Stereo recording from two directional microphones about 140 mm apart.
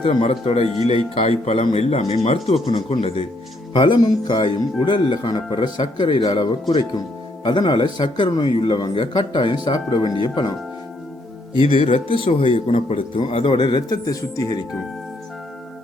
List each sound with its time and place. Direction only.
0.0 s speech: 45° left (ahead or behind)
11.7 s speech: 45° left (ahead or behind); by 14.6 s 25° left (ahead or behind)